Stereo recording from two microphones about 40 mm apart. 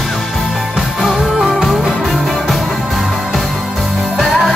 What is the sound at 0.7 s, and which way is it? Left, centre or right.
Music, centre.